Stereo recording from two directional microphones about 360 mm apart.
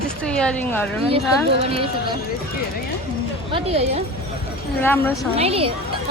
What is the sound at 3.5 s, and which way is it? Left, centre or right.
Speech, centre.